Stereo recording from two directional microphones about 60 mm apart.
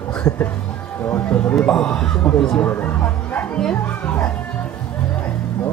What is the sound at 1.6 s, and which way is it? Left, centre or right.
Speech, centre.